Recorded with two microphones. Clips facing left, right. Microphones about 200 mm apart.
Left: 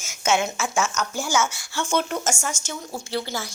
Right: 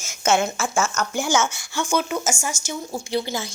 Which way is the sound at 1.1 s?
20° right (ahead or behind).